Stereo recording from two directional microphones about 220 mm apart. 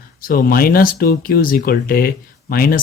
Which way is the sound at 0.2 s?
40° left (ahead or behind).